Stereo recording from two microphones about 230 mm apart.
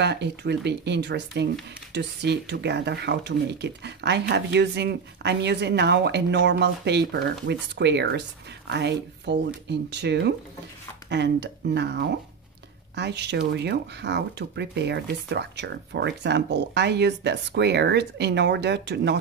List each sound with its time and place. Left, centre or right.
0.0 s speech: right